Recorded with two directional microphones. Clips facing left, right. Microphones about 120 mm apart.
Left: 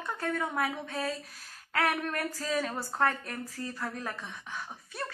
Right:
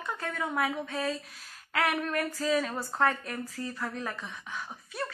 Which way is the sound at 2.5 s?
35° left (ahead or behind).